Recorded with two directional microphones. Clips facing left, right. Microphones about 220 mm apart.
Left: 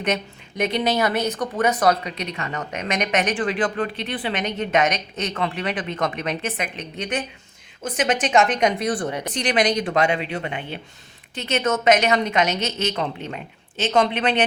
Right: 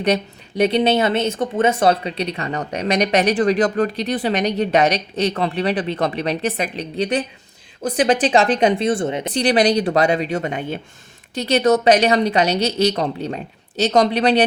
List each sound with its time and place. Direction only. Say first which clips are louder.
0.0 s speech: right 5 dB; 35° right (ahead or behind)
9.3 s speech: right 5 dB; 35° right (ahead or behind)